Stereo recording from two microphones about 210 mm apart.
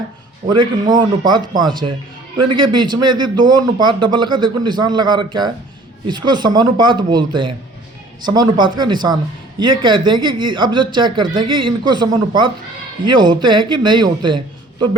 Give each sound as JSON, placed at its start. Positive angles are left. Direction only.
{"t": 0.4, "sound": "speech", "side_deg": -20}